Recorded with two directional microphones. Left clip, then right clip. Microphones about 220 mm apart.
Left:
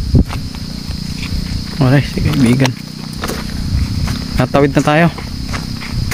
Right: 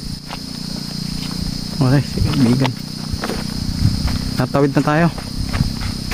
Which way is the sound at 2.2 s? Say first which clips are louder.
Left 3 dB; 50° left (ahead or behind).